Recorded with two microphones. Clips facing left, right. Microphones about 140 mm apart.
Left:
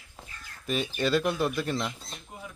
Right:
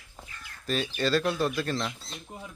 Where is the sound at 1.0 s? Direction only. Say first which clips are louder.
Even; 20° left (ahead or behind).